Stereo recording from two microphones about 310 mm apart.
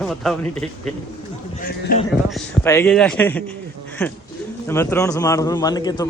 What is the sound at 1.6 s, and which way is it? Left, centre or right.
Speech, left.